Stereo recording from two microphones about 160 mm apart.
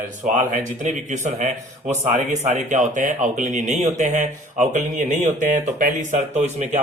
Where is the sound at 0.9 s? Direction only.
50° right (ahead or behind).